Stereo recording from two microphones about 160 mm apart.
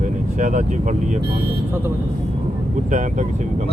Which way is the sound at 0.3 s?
55° right (ahead or behind).